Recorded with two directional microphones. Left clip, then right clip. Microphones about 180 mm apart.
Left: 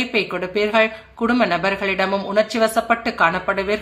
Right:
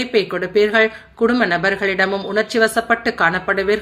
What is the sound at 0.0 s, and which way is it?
A woman's voice, 5° right (ahead or behind).